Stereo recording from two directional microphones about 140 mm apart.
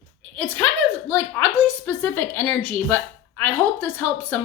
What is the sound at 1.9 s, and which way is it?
A woman's voice, 10° left (ahead or behind).